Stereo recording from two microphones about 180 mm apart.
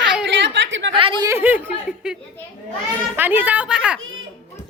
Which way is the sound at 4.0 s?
90° right.